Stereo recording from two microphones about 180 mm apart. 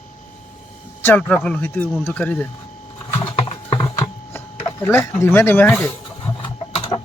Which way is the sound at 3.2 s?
25° left (ahead or behind).